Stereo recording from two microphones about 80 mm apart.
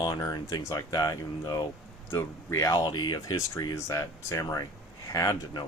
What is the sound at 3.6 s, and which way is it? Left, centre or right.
Speech, left.